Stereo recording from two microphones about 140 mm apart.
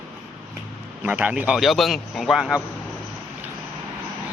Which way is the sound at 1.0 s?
10° right (ahead or behind).